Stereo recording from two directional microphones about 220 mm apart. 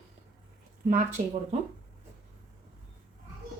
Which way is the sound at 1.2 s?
35° right (ahead or behind).